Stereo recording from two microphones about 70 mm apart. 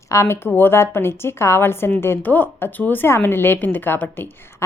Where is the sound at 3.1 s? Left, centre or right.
Left.